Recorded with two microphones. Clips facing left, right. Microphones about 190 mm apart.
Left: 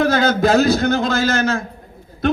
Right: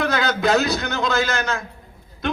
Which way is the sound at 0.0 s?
45° left (ahead or behind).